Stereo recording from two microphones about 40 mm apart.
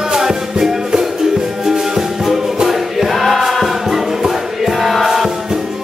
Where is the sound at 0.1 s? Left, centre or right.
Centre.